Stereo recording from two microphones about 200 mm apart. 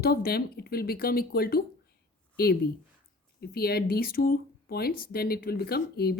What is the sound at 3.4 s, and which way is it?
Speech, 50° left (ahead or behind).